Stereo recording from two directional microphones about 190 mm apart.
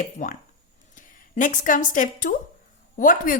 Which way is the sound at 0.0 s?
45° left (ahead or behind).